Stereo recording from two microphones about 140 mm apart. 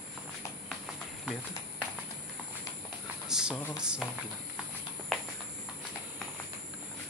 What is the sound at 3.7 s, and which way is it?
Speech, 5° right (ahead or behind).